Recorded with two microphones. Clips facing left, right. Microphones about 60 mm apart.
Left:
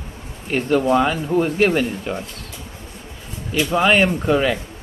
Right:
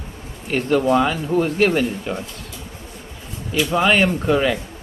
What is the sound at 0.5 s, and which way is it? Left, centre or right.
Speech, centre.